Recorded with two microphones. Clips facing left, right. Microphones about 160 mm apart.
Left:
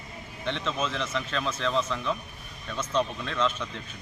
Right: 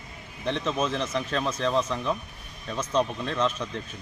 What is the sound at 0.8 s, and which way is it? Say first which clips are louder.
Speech: right 3 dB; 35° right (ahead or behind).